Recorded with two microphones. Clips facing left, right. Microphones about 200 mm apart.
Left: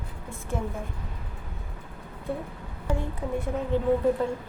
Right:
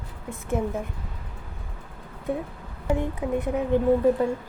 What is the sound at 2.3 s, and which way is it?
A woman's voice, 20° right (ahead or behind).